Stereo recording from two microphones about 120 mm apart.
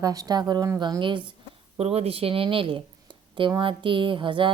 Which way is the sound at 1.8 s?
55° right (ahead or behind).